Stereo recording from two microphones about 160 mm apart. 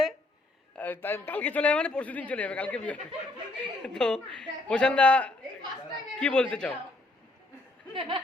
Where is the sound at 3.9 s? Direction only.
5° left (ahead or behind).